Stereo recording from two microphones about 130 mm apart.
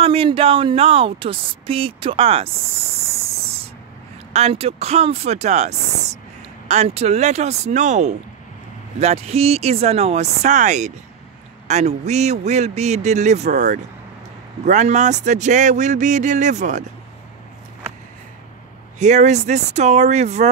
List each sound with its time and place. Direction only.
0.0 s speech: 45° right (ahead or behind)
4.3 s speech: 55° right (ahead or behind)
9.0 s speech: 55° right (ahead or behind)
18.9 s speech: 65° right (ahead or behind)